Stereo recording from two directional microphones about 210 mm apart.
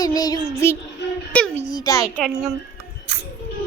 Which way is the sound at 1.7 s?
20° left (ahead or behind).